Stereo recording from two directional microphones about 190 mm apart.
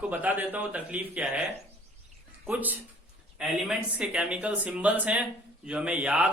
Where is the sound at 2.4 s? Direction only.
10° right (ahead or behind).